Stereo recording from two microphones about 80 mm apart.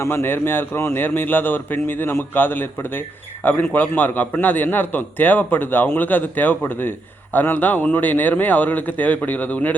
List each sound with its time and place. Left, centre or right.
0.0 s a man's voice: left